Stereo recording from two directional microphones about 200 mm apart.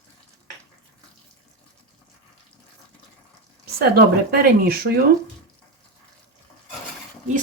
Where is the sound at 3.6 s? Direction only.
55° right (ahead or behind).